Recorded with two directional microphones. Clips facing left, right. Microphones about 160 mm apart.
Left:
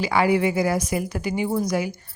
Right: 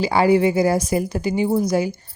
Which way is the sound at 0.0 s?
30° right (ahead or behind).